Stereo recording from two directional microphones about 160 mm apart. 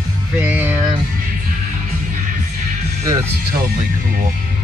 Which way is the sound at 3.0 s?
20° right (ahead or behind).